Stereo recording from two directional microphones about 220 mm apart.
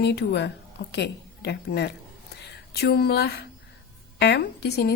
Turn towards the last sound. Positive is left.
turn(degrees=50)  # may be behind; listen again after turning